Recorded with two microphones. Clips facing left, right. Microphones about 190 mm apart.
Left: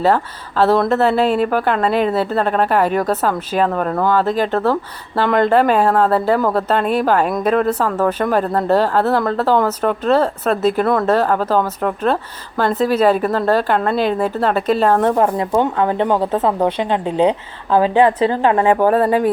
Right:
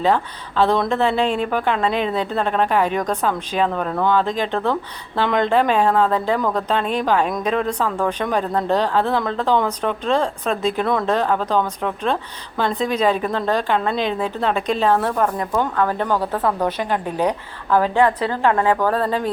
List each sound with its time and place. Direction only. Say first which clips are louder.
0.0 s a woman's voice: left 3 dB; 5° left (ahead or behind)
15.1 s a woman's voice: left 5 dB; 25° left (ahead or behind)